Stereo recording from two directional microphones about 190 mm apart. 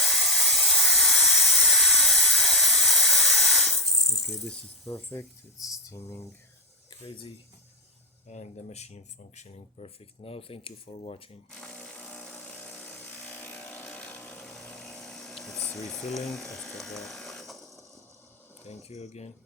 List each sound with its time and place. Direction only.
0.0 s a sound: centre (ahead or behind)
5.9 s speech: 10° left (ahead or behind)
7.0 s speech: 30° left (ahead or behind)
11.5 s vehicle: 5° left (ahead or behind)
18.9 s speech: 35° left (ahead or behind)